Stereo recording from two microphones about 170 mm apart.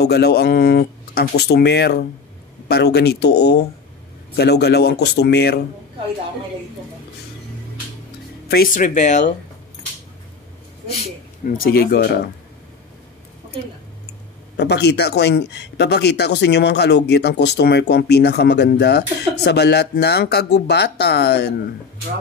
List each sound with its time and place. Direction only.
0.0 s speech: 75° left (ahead or behind)
8.7 s speech: 45° left (ahead or behind)
10.9 s speech: 45° left (ahead or behind); by 12.1 s 65° left (ahead or behind)
14.6 s speech: 75° left (ahead or behind)